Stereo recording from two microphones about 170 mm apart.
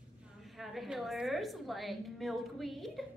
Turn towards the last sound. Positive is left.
turn(degrees=0)  # may be behind; listen again after turning